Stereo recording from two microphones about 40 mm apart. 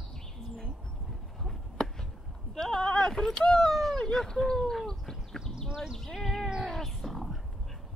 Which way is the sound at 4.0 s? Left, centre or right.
Centre.